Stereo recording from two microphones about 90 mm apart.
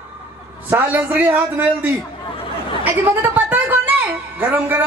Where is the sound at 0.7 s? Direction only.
20° right (ahead or behind).